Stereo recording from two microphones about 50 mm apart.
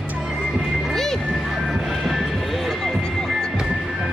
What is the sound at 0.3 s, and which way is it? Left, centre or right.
Music, centre.